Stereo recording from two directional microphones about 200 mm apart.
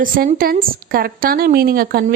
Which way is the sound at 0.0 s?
45° right (ahead or behind).